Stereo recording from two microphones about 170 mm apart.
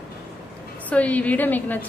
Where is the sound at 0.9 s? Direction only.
10° left (ahead or behind).